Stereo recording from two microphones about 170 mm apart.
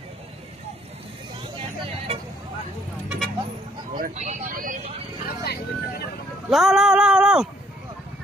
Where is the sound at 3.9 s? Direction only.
50° right (ahead or behind).